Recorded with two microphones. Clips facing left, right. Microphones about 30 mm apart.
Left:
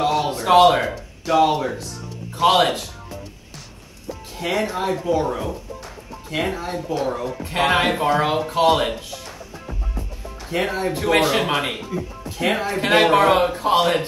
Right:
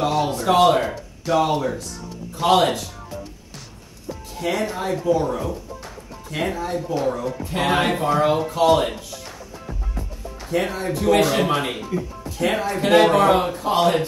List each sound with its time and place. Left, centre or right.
0.1 s a sound: centre
0.5 s speech: left
0.8 s speech: centre
1.4 s speech: centre
2.4 s speech: centre
4.4 s speech: left
10.5 s speech: left